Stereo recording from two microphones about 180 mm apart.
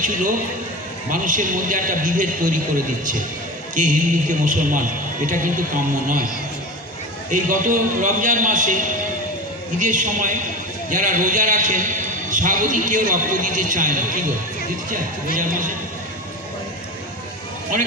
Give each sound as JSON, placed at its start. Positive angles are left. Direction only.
{"t": 0.0, "sound": "a man's voice", "side_deg": -45}
{"t": 7.3, "sound": "a man's voice", "side_deg": -45}